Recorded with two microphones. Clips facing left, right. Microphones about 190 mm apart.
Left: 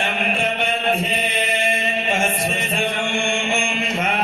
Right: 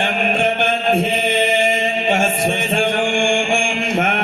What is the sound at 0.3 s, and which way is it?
Chant, 60° right (ahead or behind).